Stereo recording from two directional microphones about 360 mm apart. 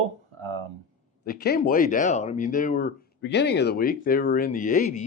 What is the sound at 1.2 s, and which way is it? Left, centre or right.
Speech, left.